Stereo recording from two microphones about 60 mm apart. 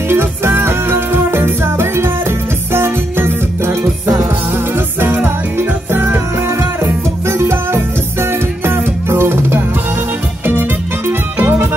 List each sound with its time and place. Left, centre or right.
0.1 s music: right
4.7 s music: right